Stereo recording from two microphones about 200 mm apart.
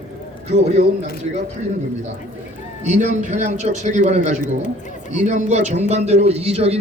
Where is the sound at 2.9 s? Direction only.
35° right (ahead or behind).